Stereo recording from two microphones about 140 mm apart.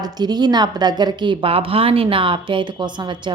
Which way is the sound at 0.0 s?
30° right (ahead or behind).